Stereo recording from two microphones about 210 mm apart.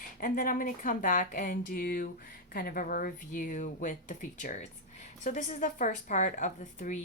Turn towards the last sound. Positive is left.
turn(degrees=35)  # may be behind; listen again after turning